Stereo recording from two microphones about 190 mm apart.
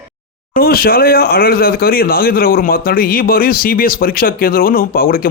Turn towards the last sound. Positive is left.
turn(degrees=50)  # may be behind; listen again after turning